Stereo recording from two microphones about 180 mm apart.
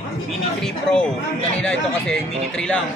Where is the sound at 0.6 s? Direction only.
5° left (ahead or behind).